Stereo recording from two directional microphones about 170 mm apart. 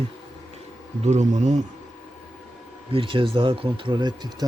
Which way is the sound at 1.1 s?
45° right (ahead or behind).